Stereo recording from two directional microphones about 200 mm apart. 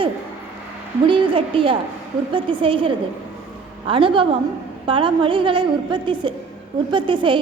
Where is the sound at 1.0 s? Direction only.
25° right (ahead or behind).